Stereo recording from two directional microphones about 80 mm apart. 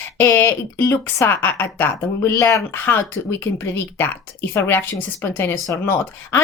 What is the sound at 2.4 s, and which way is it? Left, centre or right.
Speech, left.